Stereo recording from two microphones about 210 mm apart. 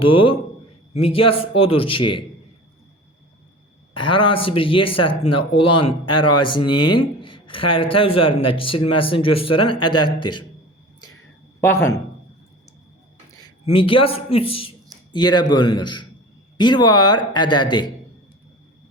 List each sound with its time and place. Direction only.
0.1 s speech: 25° left (ahead or behind)
3.9 s speech: 25° left (ahead or behind)
11.6 s a man's voice: 10° left (ahead or behind)
13.7 s speech: 25° left (ahead or behind)